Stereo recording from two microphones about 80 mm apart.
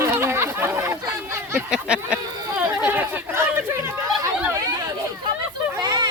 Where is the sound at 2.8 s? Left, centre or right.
Right.